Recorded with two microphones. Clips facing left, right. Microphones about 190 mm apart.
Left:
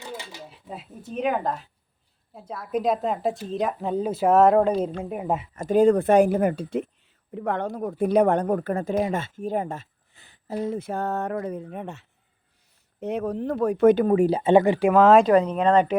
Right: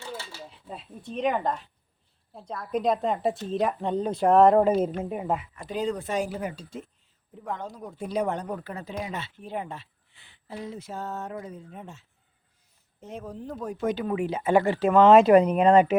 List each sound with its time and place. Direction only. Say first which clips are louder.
0.0 s a sound: left 1 dB; 15° left (ahead or behind)
0.7 s speech: left 2 dB; 5° left (ahead or behind)
5.5 s speech: left 11 dB; 50° left (ahead or behind); by 15.3 s centre (ahead or behind)
15.3 s speech: right 1 dB; 10° right (ahead or behind)